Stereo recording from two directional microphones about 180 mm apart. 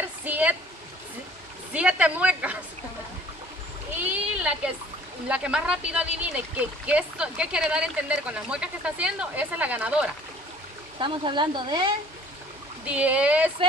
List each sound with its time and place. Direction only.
0.0 s a sound: 10° right (ahead or behind)
1.7 s speech: 5° right (ahead or behind)
3.9 s a sound: 10° right (ahead or behind)
5.3 s speech: 5° right (ahead or behind)
11.0 s speech: 25° right (ahead or behind)
12.8 s speech: 10° right (ahead or behind)